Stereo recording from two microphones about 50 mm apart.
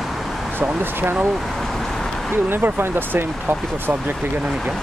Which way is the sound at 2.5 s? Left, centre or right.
Right.